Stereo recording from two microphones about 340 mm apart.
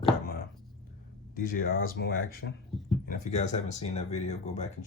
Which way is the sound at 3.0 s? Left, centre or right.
Left.